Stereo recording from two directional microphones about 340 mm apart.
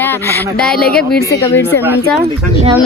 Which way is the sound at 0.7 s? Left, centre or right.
Left.